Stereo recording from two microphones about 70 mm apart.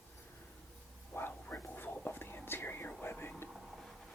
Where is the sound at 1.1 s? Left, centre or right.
Left.